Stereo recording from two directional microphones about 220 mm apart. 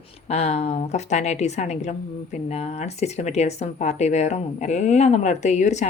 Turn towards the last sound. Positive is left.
turn(degrees=30)  # may be behind; listen again after turning